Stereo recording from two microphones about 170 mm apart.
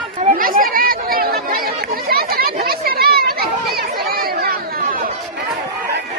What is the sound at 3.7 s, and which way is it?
Chatter, 65° right (ahead or behind).